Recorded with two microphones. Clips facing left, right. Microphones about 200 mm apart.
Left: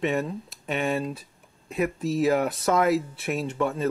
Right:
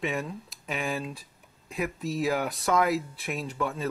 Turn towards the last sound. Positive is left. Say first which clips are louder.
# left 5 dB
turn(degrees=0)  # may be behind; listen again after turning